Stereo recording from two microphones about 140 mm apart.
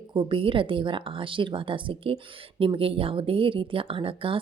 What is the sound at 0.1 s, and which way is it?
Speech, 35° right (ahead or behind).